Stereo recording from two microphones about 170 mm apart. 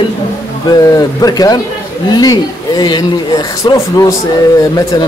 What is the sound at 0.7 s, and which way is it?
Speech, 20° left (ahead or behind).